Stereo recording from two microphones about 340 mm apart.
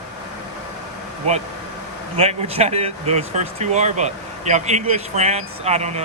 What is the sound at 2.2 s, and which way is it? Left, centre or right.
Speech, centre.